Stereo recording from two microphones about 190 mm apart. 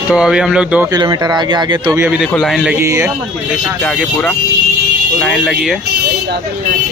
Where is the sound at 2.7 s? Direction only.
15° right (ahead or behind).